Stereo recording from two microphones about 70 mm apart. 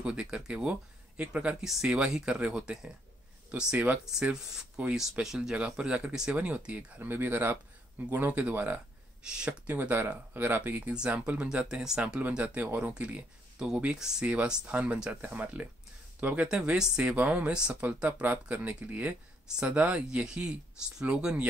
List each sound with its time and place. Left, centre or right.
0.0 s speech: centre
3.7 s speech: right
4.0 s speech: centre; by 8.8 s right
9.2 s speech: centre
9.5 s speech: right
10.9 s speech: centre